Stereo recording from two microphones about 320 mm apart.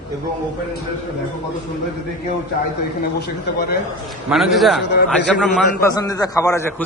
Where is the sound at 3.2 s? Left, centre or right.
Left.